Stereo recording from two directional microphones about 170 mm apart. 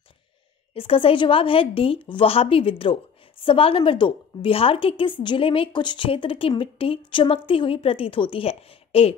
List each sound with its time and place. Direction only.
0.7 s a woman's voice: 35° left (ahead or behind)